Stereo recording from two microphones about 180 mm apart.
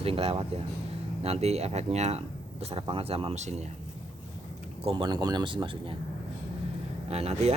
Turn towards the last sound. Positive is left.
turn(degrees=-35)  # may be behind; listen again after turning